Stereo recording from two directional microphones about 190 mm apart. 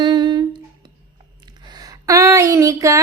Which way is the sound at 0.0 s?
20° right (ahead or behind).